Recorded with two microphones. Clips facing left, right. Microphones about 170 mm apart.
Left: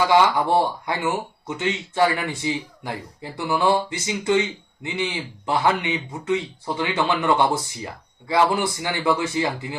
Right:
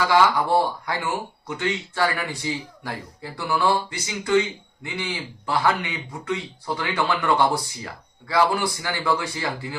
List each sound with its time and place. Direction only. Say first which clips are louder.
0.1 s speech: left 1 dB; 20° left (ahead or behind)